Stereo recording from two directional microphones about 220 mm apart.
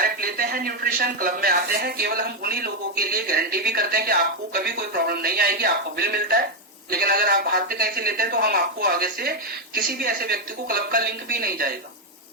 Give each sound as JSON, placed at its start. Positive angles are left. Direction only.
{"t": 0.0, "sound": "speech", "side_deg": -40}